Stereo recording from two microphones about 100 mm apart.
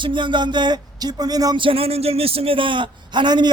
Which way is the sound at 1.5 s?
65° right (ahead or behind).